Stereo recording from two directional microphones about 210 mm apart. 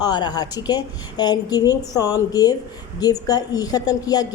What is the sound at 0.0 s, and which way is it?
A woman's voice, 20° left (ahead or behind).